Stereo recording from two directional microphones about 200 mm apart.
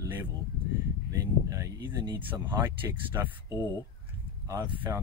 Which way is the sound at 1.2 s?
15° right (ahead or behind).